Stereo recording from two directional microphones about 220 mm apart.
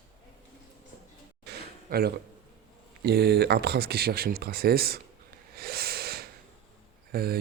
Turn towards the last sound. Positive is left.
turn(degrees=-45)  # may be behind; listen again after turning